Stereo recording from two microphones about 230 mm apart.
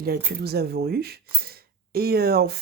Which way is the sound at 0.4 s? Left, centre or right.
Right.